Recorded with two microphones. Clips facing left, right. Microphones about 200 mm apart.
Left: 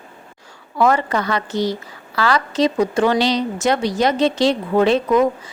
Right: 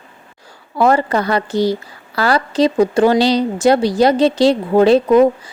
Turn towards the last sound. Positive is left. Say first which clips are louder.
# right 5 dB
turn(degrees=-35)  # may be behind; listen again after turning